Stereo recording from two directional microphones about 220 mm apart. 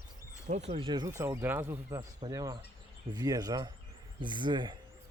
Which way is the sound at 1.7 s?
20° right (ahead or behind).